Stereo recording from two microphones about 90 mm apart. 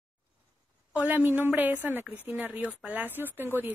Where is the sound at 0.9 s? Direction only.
20° right (ahead or behind).